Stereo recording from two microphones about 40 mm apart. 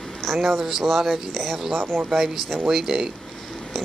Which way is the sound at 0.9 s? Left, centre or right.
Centre.